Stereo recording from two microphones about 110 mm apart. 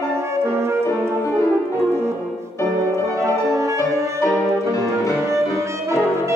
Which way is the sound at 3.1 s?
30° right (ahead or behind).